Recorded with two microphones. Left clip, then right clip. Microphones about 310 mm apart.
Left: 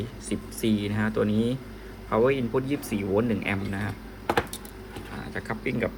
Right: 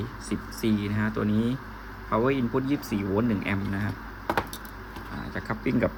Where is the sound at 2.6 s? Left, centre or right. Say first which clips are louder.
Right 1 dB; right.